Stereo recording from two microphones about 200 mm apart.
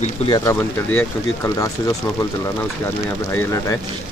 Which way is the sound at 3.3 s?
15° left (ahead or behind).